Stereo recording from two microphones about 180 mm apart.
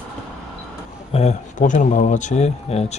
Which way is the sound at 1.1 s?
40° left (ahead or behind).